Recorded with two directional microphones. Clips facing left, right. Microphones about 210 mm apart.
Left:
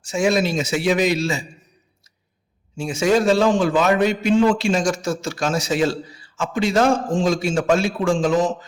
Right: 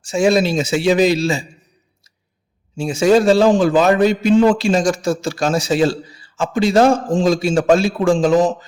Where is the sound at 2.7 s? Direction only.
35° right (ahead or behind).